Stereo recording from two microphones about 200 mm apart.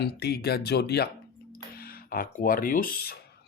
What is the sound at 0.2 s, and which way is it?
Speech, 55° left (ahead or behind).